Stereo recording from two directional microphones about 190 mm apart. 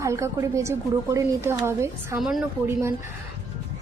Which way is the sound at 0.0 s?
15° right (ahead or behind).